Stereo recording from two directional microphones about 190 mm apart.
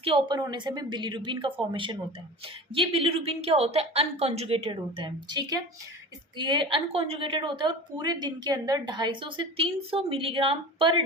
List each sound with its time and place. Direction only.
0.0 s a woman's voice: 25° right (ahead or behind)